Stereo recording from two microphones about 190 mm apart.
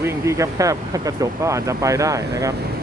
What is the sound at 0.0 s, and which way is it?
Speech, 15° right (ahead or behind).